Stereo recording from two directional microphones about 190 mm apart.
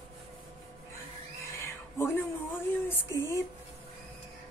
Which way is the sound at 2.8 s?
15° left (ahead or behind).